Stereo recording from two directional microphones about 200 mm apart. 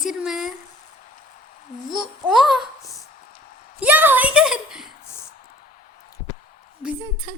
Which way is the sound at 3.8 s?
10° right (ahead or behind).